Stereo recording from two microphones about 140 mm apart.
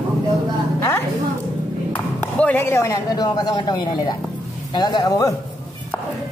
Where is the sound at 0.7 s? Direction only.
20° left (ahead or behind).